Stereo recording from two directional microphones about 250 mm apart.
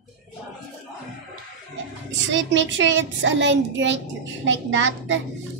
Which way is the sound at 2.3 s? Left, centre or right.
Right.